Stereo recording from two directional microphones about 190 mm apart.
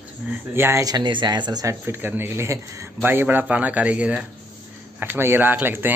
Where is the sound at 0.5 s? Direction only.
15° right (ahead or behind).